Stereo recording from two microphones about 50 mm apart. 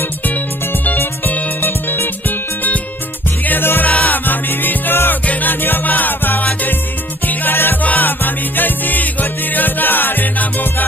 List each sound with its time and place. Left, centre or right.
1.6 s music: left
3.8 s music: left
5.2 s music: left
5.5 s music: left